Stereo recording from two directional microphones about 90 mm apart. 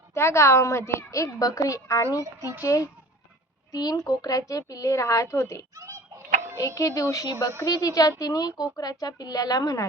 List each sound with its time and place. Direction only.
0.1 s a child's voice: 30° left (ahead or behind)
2.2 s a child's voice: 35° right (ahead or behind)
2.6 s a child's voice: 35° left (ahead or behind)
5.7 s fowl: 40° right (ahead or behind)
6.7 s a child's voice: 40° left (ahead or behind)